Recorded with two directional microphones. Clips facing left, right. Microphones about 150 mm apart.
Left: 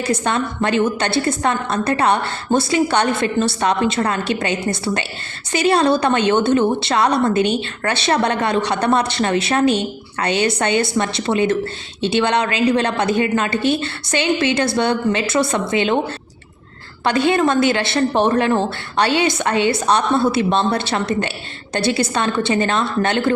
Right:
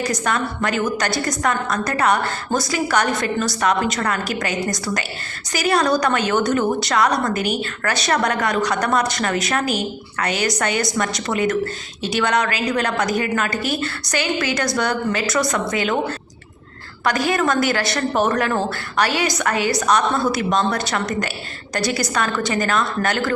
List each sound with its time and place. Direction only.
0.0 s a woman's voice: 30° left (ahead or behind)
17.0 s a woman's voice: 25° left (ahead or behind)